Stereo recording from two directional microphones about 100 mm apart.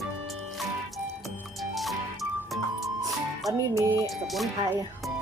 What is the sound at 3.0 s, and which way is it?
Music, 35° right (ahead or behind).